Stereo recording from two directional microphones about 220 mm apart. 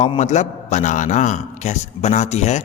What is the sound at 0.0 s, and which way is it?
A man's voice, 30° left (ahead or behind).